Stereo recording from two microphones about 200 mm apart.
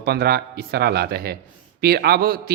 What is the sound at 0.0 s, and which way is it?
Speech, 50° right (ahead or behind).